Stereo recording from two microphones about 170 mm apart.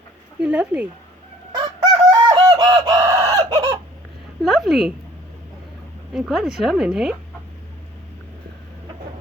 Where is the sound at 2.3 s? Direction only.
20° right (ahead or behind).